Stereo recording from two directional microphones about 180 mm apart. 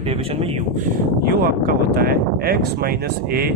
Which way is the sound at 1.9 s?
55° right (ahead or behind).